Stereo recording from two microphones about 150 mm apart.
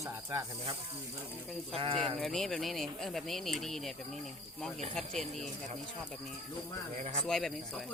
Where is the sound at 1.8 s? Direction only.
40° right (ahead or behind).